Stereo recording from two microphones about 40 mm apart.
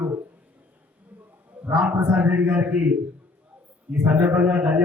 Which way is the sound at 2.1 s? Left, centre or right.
Right.